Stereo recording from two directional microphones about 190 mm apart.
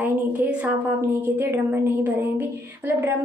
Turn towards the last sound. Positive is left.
turn(degrees=-10)  # may be behind; listen again after turning